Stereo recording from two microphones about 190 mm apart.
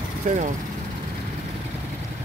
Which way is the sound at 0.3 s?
40° right (ahead or behind).